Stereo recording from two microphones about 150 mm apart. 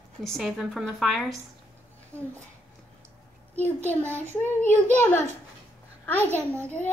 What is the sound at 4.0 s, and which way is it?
Speech, 15° right (ahead or behind).